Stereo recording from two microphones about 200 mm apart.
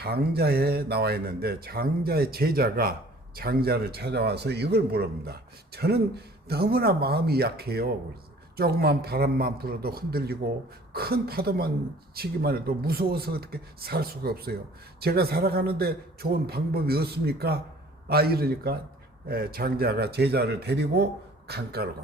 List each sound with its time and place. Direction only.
0.0 s speech: 50° right (ahead or behind)